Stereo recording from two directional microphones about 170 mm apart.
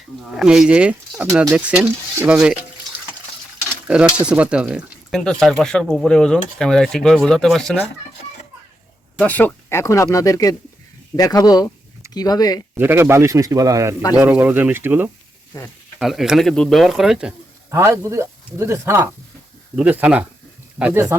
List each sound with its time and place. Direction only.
0.3 s speech: 5° right (ahead or behind)
4.3 s speech: 5° right (ahead or behind)
9.1 s speech: 10° left (ahead or behind)
12.7 s speech: 10° right (ahead or behind)
15.5 s speech: 20° left (ahead or behind)
16.0 s speech: centre (ahead or behind)
17.7 s speech: 15° right (ahead or behind)